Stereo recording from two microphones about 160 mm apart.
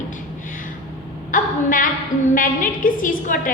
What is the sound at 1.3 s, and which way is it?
A woman's voice, 55° left (ahead or behind).